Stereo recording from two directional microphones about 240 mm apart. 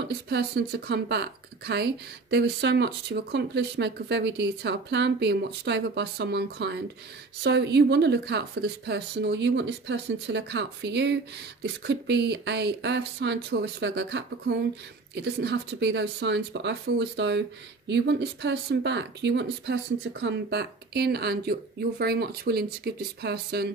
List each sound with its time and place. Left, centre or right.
0.0 s speech: right